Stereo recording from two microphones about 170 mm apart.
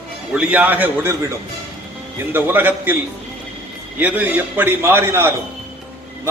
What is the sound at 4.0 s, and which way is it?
A man's voice, 10° right (ahead or behind).